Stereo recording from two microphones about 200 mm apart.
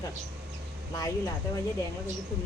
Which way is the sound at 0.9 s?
15° left (ahead or behind).